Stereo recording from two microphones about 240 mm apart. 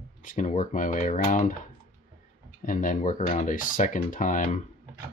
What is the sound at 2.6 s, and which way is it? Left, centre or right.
Speech, left.